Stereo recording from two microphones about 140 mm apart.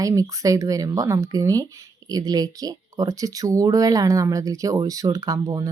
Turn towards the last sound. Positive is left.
turn(degrees=-25)  # may be behind; listen again after turning